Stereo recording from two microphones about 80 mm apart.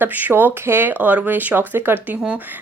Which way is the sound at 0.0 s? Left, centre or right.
Right.